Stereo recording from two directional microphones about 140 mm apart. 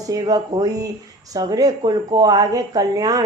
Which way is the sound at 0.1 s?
25° right (ahead or behind).